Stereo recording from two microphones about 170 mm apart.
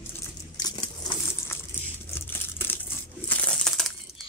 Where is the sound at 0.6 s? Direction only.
25° left (ahead or behind).